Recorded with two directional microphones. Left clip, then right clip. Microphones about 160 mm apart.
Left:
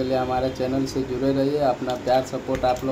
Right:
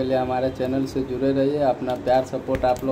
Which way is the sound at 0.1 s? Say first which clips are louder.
Right 1 dB; 10° right (ahead or behind).